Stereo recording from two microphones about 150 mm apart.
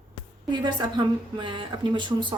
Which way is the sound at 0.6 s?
30° right (ahead or behind).